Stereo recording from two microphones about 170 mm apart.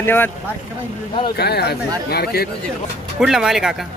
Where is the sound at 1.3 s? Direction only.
70° left (ahead or behind).